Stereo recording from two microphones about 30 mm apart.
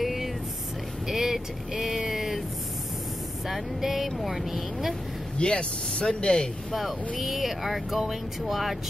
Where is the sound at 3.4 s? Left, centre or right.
Centre.